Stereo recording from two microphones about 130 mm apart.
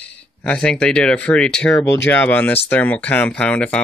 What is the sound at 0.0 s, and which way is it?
Speech, 10° left (ahead or behind).